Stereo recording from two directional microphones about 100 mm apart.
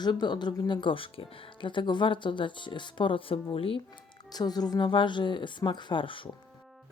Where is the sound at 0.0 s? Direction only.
45° left (ahead or behind); by 3.8 s 70° left (ahead or behind).